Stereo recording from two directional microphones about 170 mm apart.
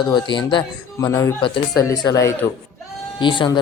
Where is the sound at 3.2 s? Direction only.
30° left (ahead or behind).